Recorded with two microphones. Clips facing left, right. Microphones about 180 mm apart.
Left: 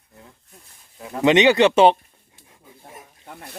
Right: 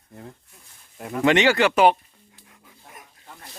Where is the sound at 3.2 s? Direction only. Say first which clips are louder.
Left 7 dB; 55° left (ahead or behind).